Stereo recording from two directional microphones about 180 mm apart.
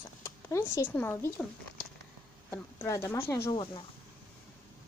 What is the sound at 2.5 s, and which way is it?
Speech, 15° left (ahead or behind).